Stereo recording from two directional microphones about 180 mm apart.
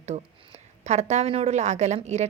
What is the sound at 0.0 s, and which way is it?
A woman's voice, 40° right (ahead or behind).